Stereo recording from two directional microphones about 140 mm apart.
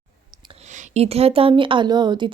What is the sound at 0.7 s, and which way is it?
A woman's voice, 55° right (ahead or behind).